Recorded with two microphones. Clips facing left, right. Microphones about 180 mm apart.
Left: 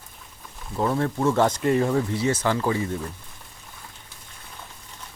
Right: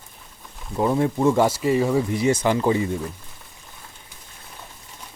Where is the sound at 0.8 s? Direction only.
15° right (ahead or behind).